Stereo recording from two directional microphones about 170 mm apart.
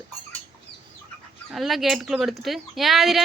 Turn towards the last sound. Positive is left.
turn(degrees=0)  # may be behind; listen again after turning